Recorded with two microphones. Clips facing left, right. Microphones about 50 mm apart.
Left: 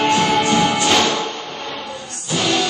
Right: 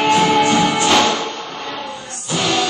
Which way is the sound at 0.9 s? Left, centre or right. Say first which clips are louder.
Right 2 dB; centre.